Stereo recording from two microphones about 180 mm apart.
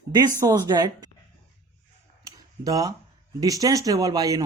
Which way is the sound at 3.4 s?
20° right (ahead or behind).